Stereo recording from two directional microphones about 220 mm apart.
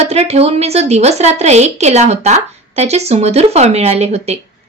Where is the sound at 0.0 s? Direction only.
30° right (ahead or behind).